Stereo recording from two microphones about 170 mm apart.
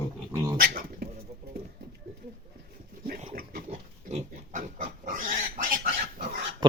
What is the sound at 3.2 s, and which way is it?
Pig, 45° right (ahead or behind).